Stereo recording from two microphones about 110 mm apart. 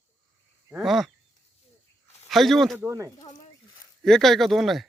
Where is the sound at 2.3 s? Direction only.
Centre (ahead or behind).